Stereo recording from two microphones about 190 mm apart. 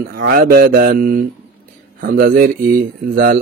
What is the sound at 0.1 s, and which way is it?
Mantra, 50° right (ahead or behind).